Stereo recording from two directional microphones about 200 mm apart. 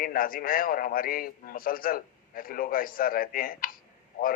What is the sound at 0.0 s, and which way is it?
A man's voice, 45° left (ahead or behind).